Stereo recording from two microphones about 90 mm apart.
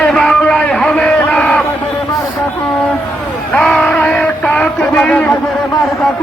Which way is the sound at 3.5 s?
5° left (ahead or behind).